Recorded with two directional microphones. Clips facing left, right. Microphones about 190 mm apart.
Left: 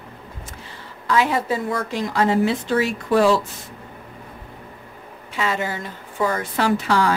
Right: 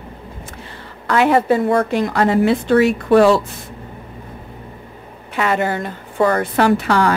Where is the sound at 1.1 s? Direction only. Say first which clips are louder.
Right 6 dB; 60° right (ahead or behind).